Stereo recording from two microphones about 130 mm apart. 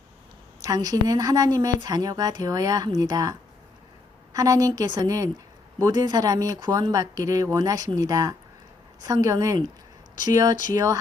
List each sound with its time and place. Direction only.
0.6 s a woman's voice: 30° right (ahead or behind)
4.4 s a woman's voice: 30° right (ahead or behind)